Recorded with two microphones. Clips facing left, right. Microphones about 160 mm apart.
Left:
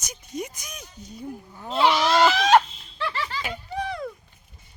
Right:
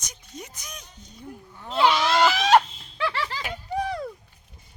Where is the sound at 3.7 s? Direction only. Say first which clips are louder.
Right 3 dB; 40° right (ahead or behind).